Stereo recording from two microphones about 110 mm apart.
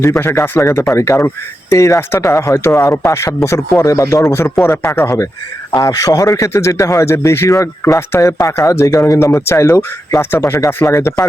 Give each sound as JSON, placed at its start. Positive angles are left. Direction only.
{"t": 0.2, "sound": "a man's voice", "side_deg": 20}